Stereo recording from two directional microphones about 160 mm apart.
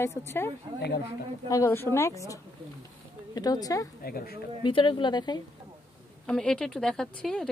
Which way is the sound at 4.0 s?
70° left (ahead or behind).